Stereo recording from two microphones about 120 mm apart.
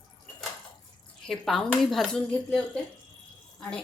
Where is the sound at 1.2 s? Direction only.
Centre (ahead or behind).